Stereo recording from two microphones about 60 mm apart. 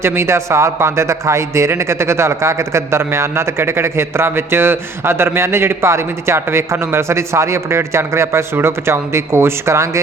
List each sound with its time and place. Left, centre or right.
0.0 s a man's voice: right